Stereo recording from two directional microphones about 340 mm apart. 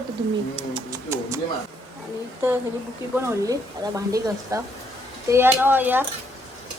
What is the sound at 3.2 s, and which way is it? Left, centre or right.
A woman's voice, centre.